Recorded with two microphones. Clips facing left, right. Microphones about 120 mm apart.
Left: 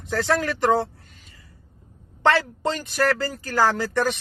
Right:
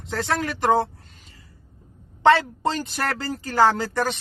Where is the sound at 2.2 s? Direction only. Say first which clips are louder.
Right 3 dB; 25° right (ahead or behind).